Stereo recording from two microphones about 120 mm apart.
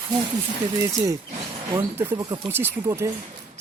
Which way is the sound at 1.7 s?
20° right (ahead or behind).